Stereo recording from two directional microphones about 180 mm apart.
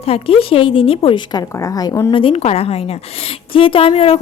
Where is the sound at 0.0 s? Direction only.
30° left (ahead or behind).